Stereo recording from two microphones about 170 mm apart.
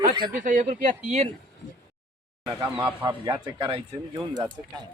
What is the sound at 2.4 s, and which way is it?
Speech, 20° right (ahead or behind).